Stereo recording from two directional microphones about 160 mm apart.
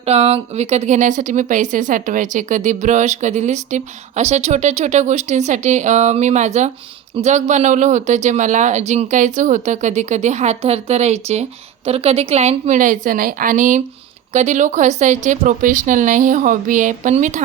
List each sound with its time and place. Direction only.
0.0 s a woman's voice: 40° right (ahead or behind)